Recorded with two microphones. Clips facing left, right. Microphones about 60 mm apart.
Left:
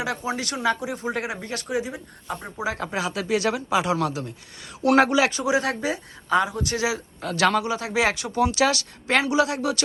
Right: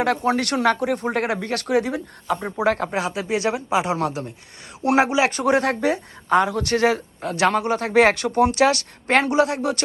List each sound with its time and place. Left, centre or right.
0.0 s speech: right
2.7 s speech: right
4.8 s speech: right
5.3 s speech: right
7.2 s speech: right
8.1 s speech: right
8.4 s speech: right